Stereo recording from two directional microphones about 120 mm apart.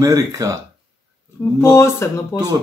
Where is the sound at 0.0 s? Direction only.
30° right (ahead or behind).